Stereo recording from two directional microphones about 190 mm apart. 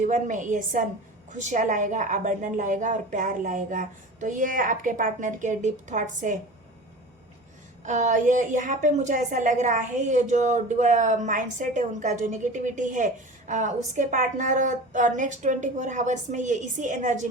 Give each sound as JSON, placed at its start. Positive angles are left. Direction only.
{"t": 0.0, "sound": "a woman's voice", "side_deg": -40}
{"t": 7.9, "sound": "a woman's voice", "side_deg": -40}